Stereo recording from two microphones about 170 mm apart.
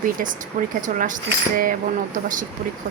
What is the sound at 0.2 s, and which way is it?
Speech, 55° right (ahead or behind).